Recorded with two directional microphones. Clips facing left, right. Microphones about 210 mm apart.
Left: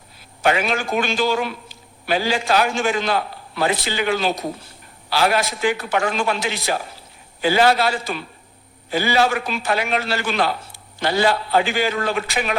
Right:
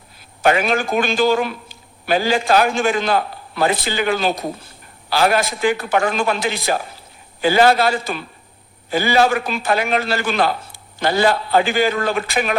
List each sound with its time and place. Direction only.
0.4 s a man's voice: 50° right (ahead or behind)